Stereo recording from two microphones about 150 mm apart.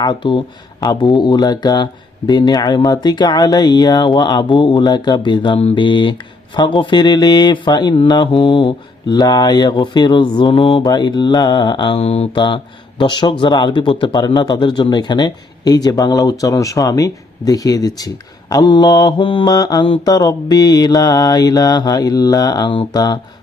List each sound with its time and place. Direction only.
0.0 s speech: 30° left (ahead or behind)